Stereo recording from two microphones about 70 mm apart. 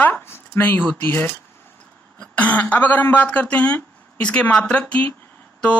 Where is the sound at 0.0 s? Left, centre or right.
Left.